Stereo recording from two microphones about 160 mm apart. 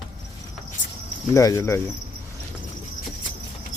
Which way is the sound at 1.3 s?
20° left (ahead or behind).